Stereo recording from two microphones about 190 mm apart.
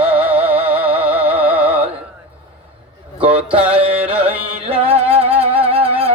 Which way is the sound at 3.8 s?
30° right (ahead or behind).